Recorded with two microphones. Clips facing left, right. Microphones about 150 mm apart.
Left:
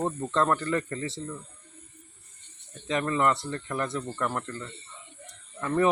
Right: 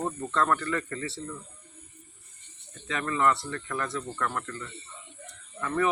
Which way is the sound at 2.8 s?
25° left (ahead or behind).